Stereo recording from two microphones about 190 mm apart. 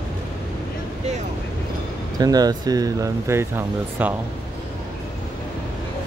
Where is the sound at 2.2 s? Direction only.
20° right (ahead or behind).